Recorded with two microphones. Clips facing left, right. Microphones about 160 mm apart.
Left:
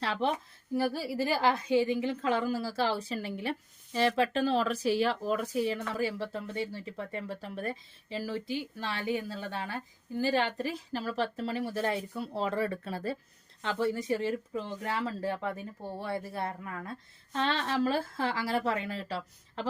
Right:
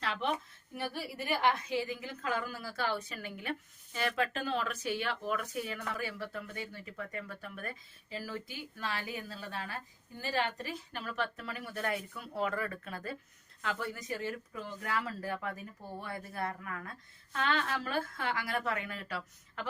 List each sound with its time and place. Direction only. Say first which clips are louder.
0.0 s speech: left 4 dB; 30° left (ahead or behind)